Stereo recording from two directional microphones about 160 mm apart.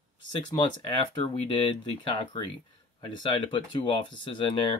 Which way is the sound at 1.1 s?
30° left (ahead or behind).